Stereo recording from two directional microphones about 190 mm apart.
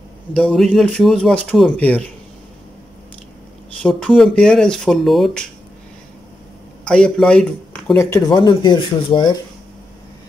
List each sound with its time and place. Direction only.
0.3 s speech: 5° left (ahead or behind)
3.8 s speech: 5° left (ahead or behind)
6.8 s speech: 5° left (ahead or behind); by 9.4 s 25° left (ahead or behind)